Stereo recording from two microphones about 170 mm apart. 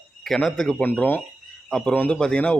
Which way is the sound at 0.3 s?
Centre (ahead or behind).